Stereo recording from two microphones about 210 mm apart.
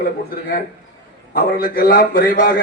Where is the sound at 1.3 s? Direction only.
40° left (ahead or behind).